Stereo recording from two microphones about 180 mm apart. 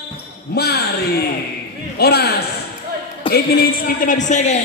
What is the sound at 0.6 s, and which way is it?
Speech, 60° left (ahead or behind).